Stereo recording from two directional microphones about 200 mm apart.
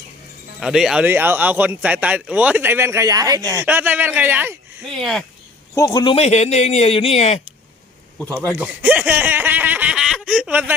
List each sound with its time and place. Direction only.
0.6 s speech: centre (ahead or behind)
4.9 s speech: centre (ahead or behind)
5.7 s a man's voice: 20° left (ahead or behind)
6.1 s speech: 35° left (ahead or behind)
8.5 s speech: 10° right (ahead or behind)